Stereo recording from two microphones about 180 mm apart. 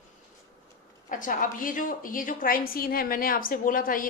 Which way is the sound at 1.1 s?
50° left (ahead or behind).